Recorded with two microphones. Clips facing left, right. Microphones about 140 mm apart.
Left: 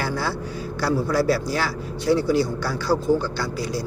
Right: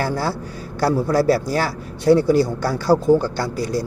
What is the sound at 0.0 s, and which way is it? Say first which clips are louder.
A man's voice: right 3 dB; 40° right (ahead or behind).